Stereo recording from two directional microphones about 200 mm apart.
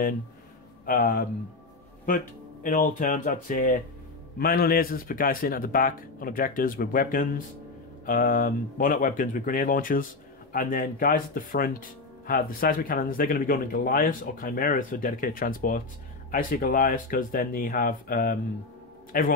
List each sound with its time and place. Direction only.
0.8 s speech: 45° left (ahead or behind)